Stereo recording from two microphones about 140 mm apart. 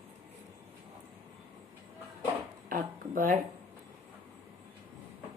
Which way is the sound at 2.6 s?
80° right.